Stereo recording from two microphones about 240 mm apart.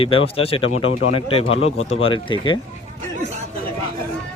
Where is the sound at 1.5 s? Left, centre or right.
Left.